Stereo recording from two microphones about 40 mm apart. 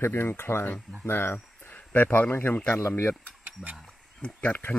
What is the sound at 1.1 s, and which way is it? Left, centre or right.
Speech, left.